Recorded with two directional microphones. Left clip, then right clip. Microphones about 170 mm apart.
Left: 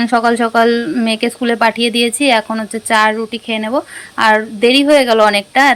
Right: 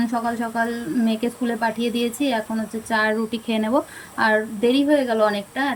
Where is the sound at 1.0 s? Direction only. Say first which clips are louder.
Left 9 dB; centre (ahead or behind).